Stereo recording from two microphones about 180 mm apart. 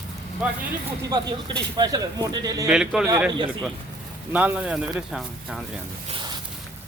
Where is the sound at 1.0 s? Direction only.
20° right (ahead or behind).